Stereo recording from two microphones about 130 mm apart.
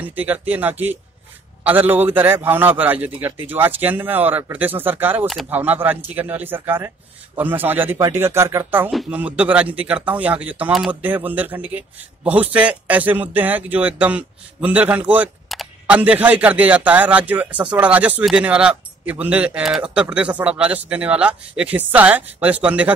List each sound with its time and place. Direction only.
0.0 s speech: 10° right (ahead or behind)
15.4 s camera: centre (ahead or behind)
16.0 s speech: 10° right (ahead or behind)